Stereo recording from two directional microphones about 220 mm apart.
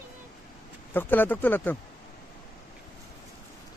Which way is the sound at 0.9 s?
10° left (ahead or behind).